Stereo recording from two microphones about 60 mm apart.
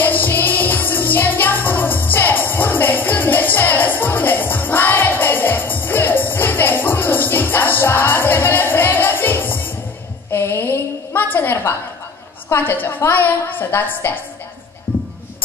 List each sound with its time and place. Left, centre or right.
0.0 s music: left
10.3 s a sound: left
12.5 s a woman's voice: left
14.9 s music: left